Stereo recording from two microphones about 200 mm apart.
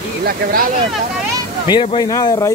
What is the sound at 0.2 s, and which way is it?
Speech, 50° right (ahead or behind).